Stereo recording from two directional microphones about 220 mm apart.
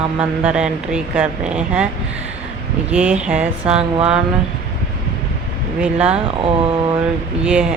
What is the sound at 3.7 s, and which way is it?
Mantra, 25° right (ahead or behind).